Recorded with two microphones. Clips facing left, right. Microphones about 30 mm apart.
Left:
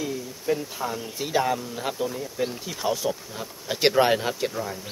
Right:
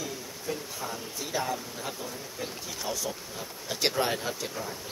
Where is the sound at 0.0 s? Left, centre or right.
Left.